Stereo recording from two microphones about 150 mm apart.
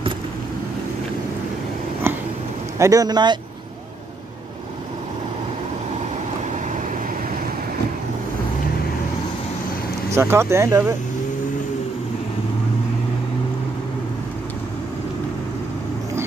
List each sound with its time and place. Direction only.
2.1 s a sound: 15° right (ahead or behind)
2.8 s speech: 25° right (ahead or behind)
10.1 s speech: 15° right (ahead or behind)